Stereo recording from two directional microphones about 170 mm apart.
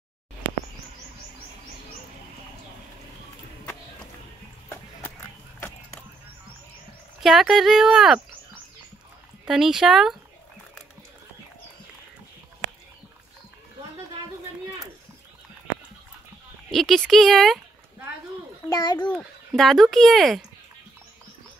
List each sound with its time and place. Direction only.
7.2 s speech: centre (ahead or behind)
9.5 s speech: 5° right (ahead or behind)
16.7 s speech: centre (ahead or behind)
18.7 s a child's voice: 25° left (ahead or behind)
19.1 s speech: centre (ahead or behind)